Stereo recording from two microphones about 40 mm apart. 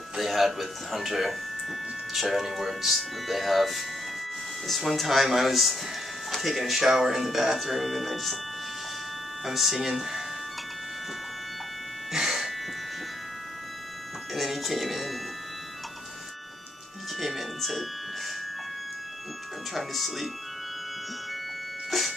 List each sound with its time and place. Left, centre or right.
0.2 s speech: centre
9.4 s speech: centre
12.1 s music: centre
14.3 s music: centre
17.2 s music: centre
19.7 s speech: centre
21.9 s a sound: centre